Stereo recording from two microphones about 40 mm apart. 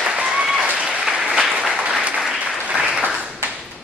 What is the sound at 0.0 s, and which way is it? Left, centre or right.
Applause, right.